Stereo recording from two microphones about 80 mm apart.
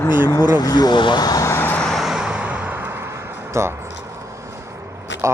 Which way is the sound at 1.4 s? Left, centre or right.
Left.